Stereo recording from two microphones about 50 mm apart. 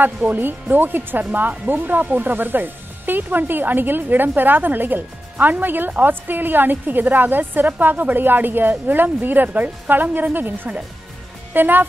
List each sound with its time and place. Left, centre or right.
0.0 s speech: right